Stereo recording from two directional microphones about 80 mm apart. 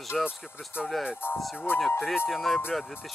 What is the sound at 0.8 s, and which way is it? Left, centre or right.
Speech, centre.